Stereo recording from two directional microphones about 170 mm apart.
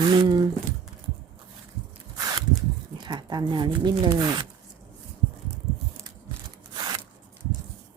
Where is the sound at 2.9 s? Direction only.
25° right (ahead or behind).